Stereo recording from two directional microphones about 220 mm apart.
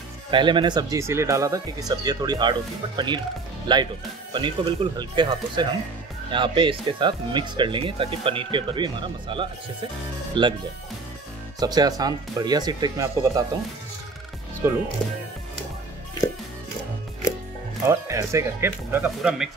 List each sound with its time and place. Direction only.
0.3 s speech: 20° right (ahead or behind)
3.6 s speech: 20° right (ahead or behind)
11.6 s speech: 15° right (ahead or behind)
14.6 s speech: 10° right (ahead or behind)
17.8 s speech: 15° right (ahead or behind)